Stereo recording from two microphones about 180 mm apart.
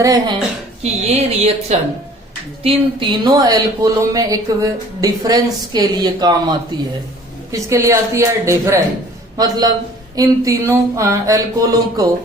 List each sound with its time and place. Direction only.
0.0 s speech: 20° right (ahead or behind)
0.8 s speech: 35° right (ahead or behind)
2.6 s speech: 25° right (ahead or behind)